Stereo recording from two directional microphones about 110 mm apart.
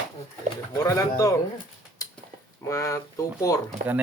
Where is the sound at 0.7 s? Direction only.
30° left (ahead or behind).